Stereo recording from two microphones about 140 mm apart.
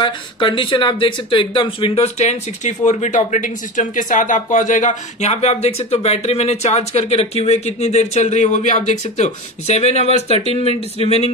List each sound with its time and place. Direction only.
0.0 s speech: 35° left (ahead or behind)